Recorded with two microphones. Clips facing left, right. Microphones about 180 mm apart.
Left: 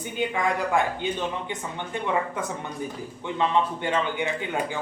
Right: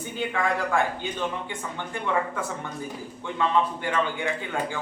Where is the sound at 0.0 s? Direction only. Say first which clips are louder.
Left 1 dB; 15° left (ahead or behind).